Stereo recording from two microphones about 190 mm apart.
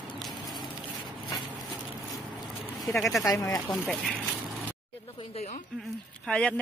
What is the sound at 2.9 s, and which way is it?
Speech, centre (ahead or behind).